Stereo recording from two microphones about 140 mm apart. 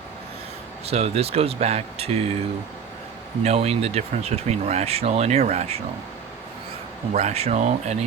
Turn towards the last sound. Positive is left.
turn(degrees=-55)  # may be behind; listen again after turning